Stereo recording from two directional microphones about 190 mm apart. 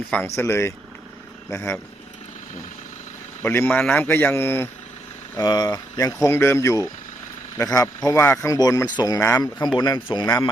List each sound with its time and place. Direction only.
0.3 s speech: 15° left (ahead or behind)
3.4 s a man's voice: 10° left (ahead or behind)